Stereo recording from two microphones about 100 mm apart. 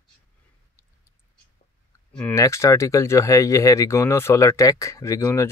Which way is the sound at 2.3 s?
30° left (ahead or behind).